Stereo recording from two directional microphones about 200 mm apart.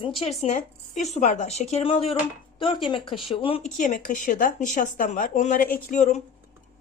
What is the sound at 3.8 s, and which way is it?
Speech, 40° left (ahead or behind).